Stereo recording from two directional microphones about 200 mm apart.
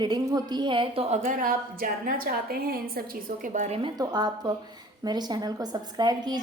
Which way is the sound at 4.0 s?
20° right (ahead or behind).